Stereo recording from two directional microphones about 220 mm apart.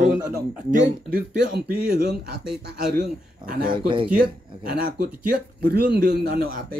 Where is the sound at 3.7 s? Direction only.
20° right (ahead or behind).